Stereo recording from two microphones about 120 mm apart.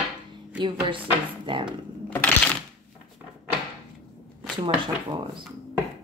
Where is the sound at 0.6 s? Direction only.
45° right (ahead or behind).